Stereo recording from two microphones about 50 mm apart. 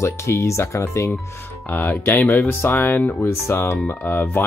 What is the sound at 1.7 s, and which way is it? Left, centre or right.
Speech, left.